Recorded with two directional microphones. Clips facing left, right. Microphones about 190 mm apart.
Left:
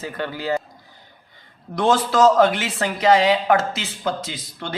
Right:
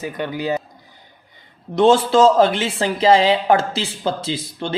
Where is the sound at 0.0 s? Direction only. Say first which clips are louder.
Right 3 dB; 15° right (ahead or behind).